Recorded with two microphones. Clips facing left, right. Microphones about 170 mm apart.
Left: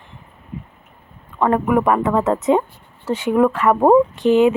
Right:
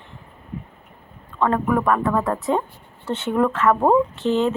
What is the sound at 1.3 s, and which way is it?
Speech, 15° left (ahead or behind).